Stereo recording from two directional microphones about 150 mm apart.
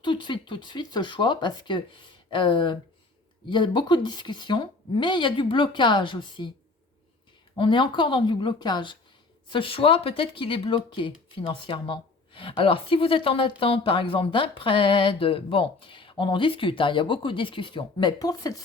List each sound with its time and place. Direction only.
0.0 s speech: 30° left (ahead or behind)
7.5 s speech: 35° left (ahead or behind)